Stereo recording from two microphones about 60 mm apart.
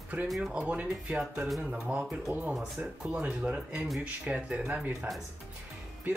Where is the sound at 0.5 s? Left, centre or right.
Right.